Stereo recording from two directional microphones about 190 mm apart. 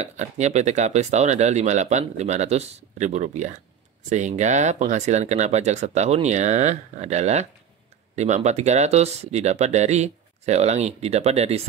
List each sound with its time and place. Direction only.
0.0 s speech: 35° right (ahead or behind)